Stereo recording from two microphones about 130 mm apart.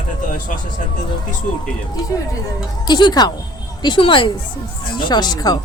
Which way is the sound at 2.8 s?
35° left (ahead or behind).